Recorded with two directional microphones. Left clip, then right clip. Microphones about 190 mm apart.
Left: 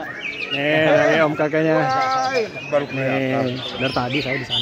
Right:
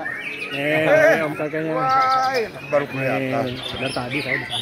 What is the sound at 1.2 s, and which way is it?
Speech, 35° left (ahead or behind).